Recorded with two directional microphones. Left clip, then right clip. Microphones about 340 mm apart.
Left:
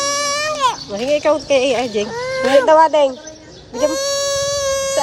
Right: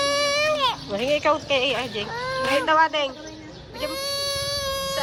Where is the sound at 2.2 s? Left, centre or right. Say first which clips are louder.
Left 6 dB; left.